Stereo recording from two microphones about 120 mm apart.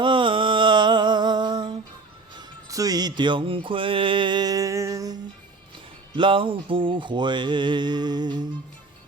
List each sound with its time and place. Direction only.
0.0 s a sound: 45° right (ahead or behind)
2.4 s music: 30° right (ahead or behind)
6.1 s music: 45° right (ahead or behind)